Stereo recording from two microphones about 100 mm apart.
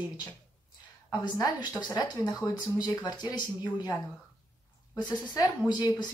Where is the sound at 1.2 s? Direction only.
40° left (ahead or behind).